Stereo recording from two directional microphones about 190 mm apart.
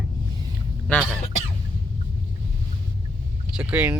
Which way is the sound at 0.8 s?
5° left (ahead or behind).